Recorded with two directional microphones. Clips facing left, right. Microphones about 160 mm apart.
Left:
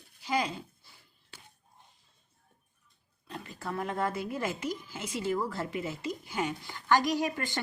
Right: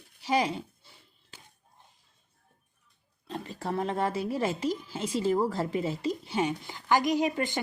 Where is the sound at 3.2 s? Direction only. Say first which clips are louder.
Right 5 dB; 30° right (ahead or behind).